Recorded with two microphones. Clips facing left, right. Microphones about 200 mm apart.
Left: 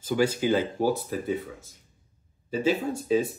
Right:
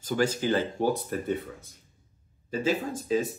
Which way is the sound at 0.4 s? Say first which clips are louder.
Left 2 dB; 10° left (ahead or behind).